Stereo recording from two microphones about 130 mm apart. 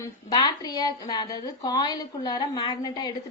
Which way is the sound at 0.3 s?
30° left (ahead or behind).